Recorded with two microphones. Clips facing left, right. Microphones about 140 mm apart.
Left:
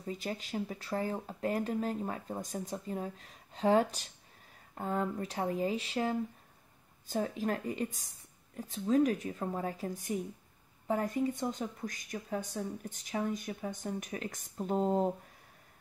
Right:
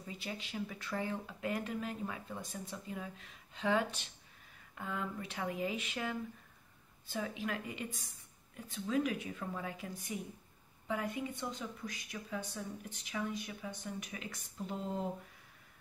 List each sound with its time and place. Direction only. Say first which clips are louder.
0.0 s speech: left 6 dB; 40° left (ahead or behind)